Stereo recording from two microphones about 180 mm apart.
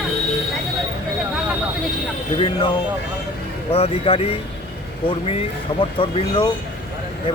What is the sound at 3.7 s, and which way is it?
Speech, 30° left (ahead or behind).